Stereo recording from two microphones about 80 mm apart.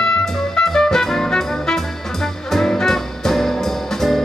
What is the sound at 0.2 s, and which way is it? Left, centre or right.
Music, centre.